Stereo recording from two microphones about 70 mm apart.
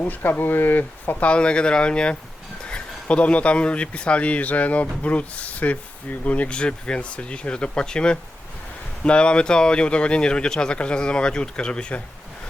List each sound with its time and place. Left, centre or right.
0.0 s speech: left
1.3 s speech: centre